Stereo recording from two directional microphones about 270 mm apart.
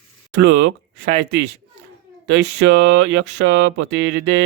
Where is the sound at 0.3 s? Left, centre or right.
Right.